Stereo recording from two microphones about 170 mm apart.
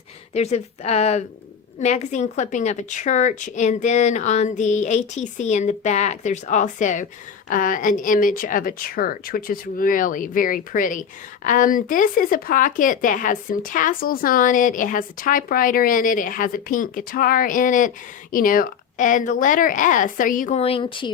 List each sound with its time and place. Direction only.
0.3 s speech: 40° left (ahead or behind)
20.6 s speech: 35° left (ahead or behind)